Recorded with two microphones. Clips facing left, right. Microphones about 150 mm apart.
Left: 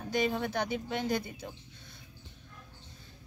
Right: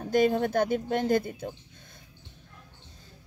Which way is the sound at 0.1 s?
50° right (ahead or behind).